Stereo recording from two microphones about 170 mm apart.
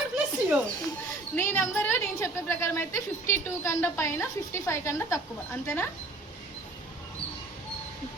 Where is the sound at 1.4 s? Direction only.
15° left (ahead or behind).